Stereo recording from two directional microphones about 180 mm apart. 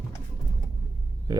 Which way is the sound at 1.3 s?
20° right (ahead or behind).